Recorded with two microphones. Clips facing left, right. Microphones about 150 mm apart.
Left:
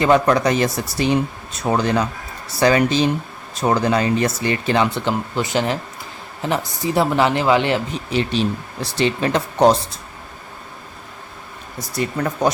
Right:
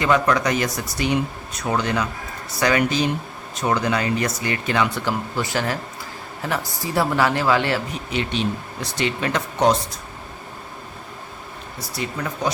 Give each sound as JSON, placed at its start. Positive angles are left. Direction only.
{"t": 0.0, "sound": "speech", "side_deg": 30}
{"t": 8.1, "sound": "speech", "side_deg": 35}
{"t": 11.8, "sound": "speech", "side_deg": 45}